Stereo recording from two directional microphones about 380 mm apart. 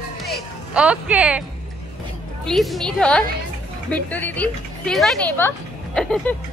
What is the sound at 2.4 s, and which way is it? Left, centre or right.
A woman's voice, centre.